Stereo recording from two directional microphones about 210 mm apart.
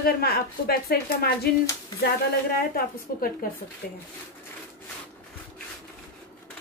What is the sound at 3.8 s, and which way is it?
Speech, 45° left (ahead or behind).